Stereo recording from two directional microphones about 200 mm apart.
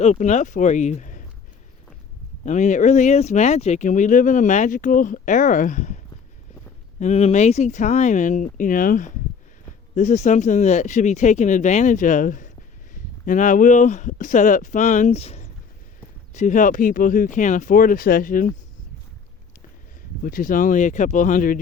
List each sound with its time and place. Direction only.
0.0 s speech: 35° left (ahead or behind)
2.4 s speech: 35° left (ahead or behind)
7.0 s speech: 30° left (ahead or behind)
20.2 s speech: 45° left (ahead or behind)